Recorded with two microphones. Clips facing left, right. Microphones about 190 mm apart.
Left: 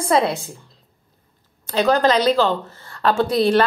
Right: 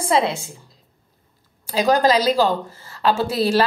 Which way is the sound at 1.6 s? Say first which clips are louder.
Even; 10° right (ahead or behind).